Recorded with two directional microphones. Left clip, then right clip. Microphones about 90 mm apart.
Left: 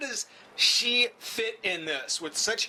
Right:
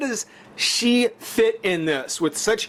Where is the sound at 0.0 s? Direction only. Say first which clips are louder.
Right 7 dB; 25° right (ahead or behind).